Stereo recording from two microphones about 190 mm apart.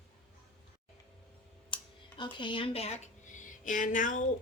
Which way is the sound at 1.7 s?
25° left (ahead or behind).